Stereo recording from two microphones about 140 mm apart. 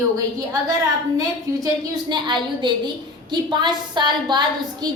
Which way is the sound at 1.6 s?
30° right (ahead or behind).